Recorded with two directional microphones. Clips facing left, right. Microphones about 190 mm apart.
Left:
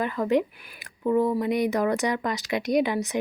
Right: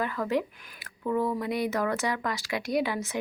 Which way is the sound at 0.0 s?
20° left (ahead or behind).